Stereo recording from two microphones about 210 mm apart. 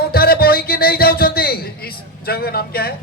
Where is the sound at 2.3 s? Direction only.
45° left (ahead or behind).